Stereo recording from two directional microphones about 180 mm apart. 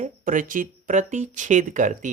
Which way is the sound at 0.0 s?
45° right (ahead or behind).